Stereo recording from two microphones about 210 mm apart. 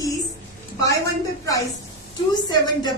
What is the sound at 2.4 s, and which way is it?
Speech, 20° left (ahead or behind).